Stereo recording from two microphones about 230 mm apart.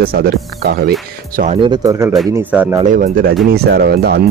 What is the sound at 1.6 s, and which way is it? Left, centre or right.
A man's voice, centre.